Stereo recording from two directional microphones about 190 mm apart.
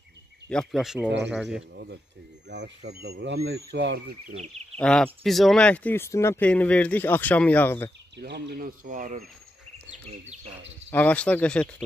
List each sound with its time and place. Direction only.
0.5 s speech: 5° left (ahead or behind)
1.6 s speech: 65° right (ahead or behind)
4.7 s speech: 5° left (ahead or behind)
8.2 s speech: 60° right (ahead or behind); by 9.2 s 45° right (ahead or behind)
10.9 s speech: 10° left (ahead or behind)